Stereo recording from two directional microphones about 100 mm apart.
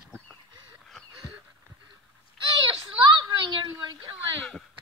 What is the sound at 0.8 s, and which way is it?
Wheeze, centre (ahead or behind).